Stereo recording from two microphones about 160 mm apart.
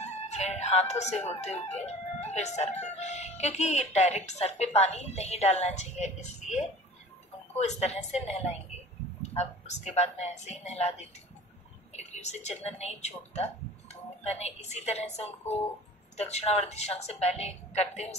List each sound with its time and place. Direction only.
0.0 s a woman's voice: 45° left (ahead or behind)